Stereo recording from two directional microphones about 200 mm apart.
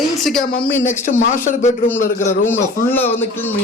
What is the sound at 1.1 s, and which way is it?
Speech, 40° left (ahead or behind).